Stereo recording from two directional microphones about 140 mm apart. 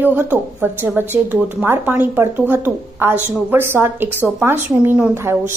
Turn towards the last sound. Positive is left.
turn(degrees=-15)  # may be behind; listen again after turning